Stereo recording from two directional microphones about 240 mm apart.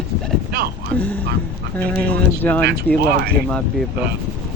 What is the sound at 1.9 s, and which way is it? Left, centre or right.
Speech, centre.